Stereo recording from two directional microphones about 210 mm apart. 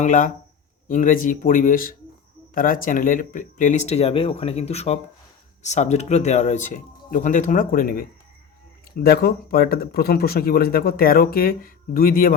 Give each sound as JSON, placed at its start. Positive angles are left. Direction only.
{"t": 0.0, "sound": "speech", "side_deg": 35}